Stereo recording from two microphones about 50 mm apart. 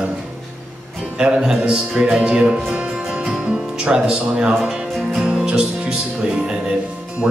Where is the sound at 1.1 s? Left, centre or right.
Centre.